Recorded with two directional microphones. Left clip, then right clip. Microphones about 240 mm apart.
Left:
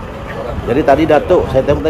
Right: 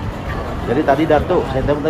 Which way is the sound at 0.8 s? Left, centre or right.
Left.